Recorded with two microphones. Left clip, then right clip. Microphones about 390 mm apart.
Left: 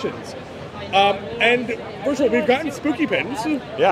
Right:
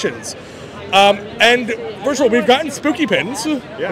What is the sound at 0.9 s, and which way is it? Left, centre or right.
A man's voice, right.